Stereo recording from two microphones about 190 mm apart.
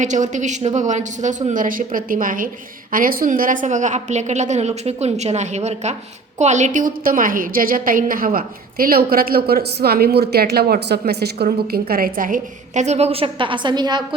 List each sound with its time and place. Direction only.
0.0 s a woman's voice: 40° right (ahead or behind); by 14.2 s 20° right (ahead or behind)